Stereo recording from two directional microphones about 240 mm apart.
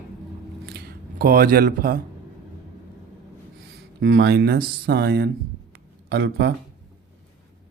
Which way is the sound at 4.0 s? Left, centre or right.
Right.